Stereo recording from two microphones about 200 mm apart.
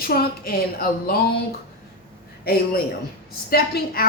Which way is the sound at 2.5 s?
50° left (ahead or behind).